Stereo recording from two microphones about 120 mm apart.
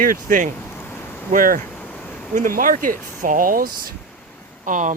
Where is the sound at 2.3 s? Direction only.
90° right.